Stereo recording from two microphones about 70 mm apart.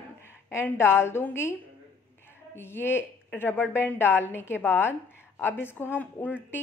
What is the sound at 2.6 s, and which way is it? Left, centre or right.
A woman's voice, left.